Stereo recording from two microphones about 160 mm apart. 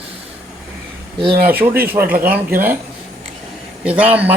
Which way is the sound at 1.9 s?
65° right (ahead or behind).